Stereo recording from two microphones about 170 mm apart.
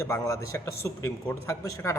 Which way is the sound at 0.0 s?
15° left (ahead or behind).